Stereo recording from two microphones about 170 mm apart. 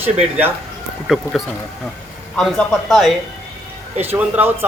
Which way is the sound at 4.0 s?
10° right (ahead or behind).